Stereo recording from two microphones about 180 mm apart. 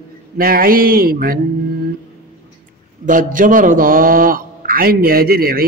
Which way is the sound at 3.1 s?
50° right (ahead or behind).